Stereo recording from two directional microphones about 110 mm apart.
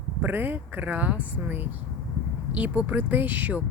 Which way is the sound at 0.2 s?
15° right (ahead or behind).